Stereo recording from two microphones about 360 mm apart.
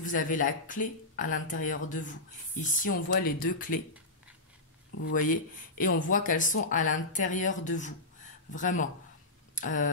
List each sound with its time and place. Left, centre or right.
0.0 s speech: left
4.9 s speech: left
9.6 s a sound: left